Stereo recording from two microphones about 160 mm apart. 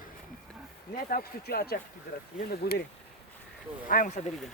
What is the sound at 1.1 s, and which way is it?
Speech, 70° left (ahead or behind).